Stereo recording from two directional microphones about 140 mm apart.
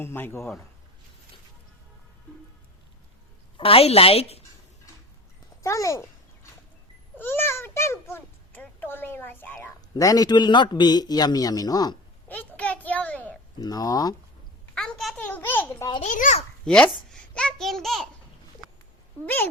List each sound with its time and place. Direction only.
0.0 s a man's voice: 15° left (ahead or behind)
3.6 s a woman's voice: 45° left (ahead or behind)
5.6 s a sound: 20° left (ahead or behind)
7.2 s a child's voice: 15° left (ahead or behind)
9.9 s a man's voice: 25° left (ahead or behind)
12.3 s a sound: 10° left (ahead or behind)
13.6 s a man's voice: 25° left (ahead or behind)
14.8 s a child's voice: centre (ahead or behind)
16.0 s a child's voice: 65° left (ahead or behind)
16.6 s a man's voice: 5° left (ahead or behind)
19.2 s a man's voice: 15° left (ahead or behind)